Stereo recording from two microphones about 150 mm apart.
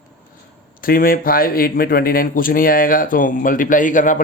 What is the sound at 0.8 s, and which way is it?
A man's voice, 70° left (ahead or behind).